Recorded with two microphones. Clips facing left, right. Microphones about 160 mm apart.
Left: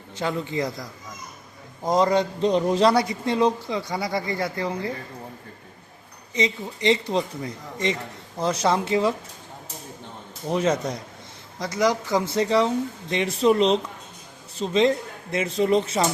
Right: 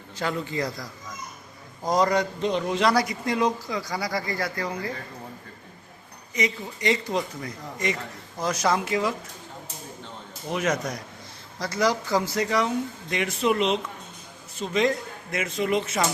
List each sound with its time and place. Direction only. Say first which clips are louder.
0.2 s speech: left 2 dB; 20° left (ahead or behind)
2.5 s speech: left 4 dB; 35° left (ahead or behind)
6.3 s speech: left 3 dB; 25° left (ahead or behind)
10.5 s speech: left 4 dB; 30° left (ahead or behind)